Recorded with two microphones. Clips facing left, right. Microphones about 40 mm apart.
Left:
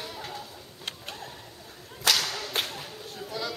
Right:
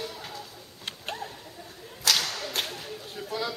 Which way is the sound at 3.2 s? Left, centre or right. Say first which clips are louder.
Right 2 dB; centre.